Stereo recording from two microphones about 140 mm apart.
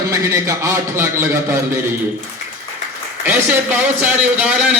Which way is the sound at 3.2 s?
15° right (ahead or behind).